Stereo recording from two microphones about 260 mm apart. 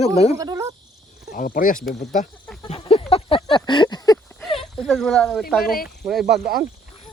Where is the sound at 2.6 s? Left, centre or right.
Left.